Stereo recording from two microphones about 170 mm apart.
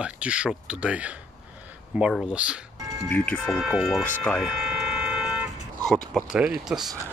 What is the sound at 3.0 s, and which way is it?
Speech, 10° left (ahead or behind).